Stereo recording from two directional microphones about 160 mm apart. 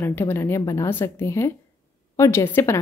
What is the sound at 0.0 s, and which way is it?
Speech, 15° left (ahead or behind).